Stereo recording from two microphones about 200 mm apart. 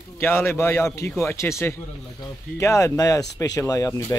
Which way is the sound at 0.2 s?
10° left (ahead or behind).